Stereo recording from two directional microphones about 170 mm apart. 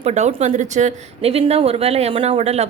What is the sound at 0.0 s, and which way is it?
Speech, 40° right (ahead or behind).